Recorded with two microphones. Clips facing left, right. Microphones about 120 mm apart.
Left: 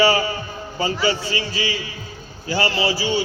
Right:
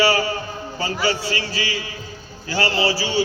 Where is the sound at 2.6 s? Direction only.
30° right (ahead or behind).